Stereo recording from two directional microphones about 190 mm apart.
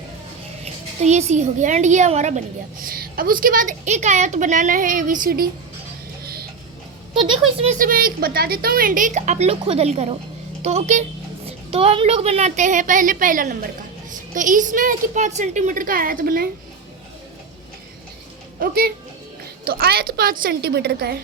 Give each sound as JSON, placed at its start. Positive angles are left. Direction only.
{"t": 0.6, "sound": "a woman's voice", "side_deg": -35}
{"t": 2.8, "sound": "a woman's voice", "side_deg": -50}
{"t": 6.2, "sound": "music", "side_deg": -55}
{"t": 7.1, "sound": "speech", "side_deg": -25}
{"t": 7.7, "sound": "a woman's voice", "side_deg": -45}
{"t": 18.6, "sound": "a woman's voice", "side_deg": -50}